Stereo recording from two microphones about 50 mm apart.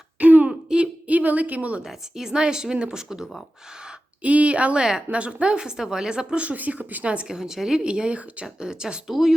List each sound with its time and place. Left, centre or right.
0.2 s throat clearing: right
0.4 s a sound: right
1.8 s speech: centre
4.2 s a woman's voice: right
4.8 s speech: centre
5.1 s a woman's voice: right
7.3 s speech: centre
7.9 s a woman's voice: right
9.0 s speech: centre